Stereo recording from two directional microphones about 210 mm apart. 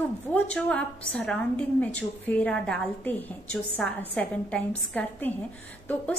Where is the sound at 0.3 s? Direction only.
5° left (ahead or behind).